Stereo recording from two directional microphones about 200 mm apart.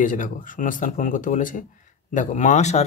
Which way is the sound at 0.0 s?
40° left (ahead or behind).